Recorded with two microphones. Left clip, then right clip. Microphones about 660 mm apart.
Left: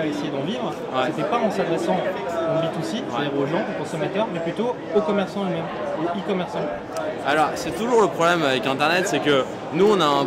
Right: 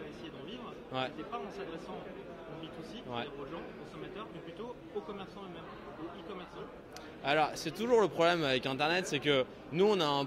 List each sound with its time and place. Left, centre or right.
7.2 s speech: right